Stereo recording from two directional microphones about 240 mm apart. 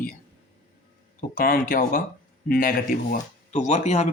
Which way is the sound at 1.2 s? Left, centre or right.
Left.